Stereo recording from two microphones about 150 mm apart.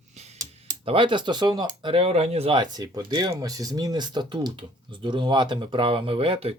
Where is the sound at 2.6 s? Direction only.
25° right (ahead or behind).